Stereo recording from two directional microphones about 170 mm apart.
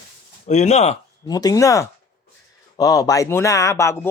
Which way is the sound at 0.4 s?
45° left (ahead or behind).